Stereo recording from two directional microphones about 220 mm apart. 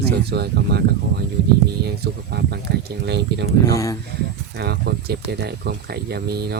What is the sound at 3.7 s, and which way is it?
Speech, 15° left (ahead or behind).